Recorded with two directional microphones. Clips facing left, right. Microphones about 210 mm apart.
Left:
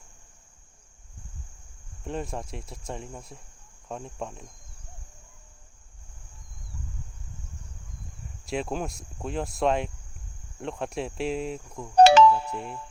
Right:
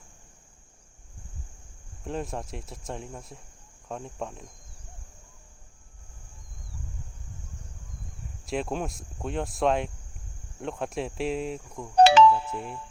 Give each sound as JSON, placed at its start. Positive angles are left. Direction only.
{"t": 2.0, "sound": "speech", "side_deg": 0}
{"t": 8.4, "sound": "speech", "side_deg": 0}
{"t": 11.9, "sound": "music", "side_deg": 45}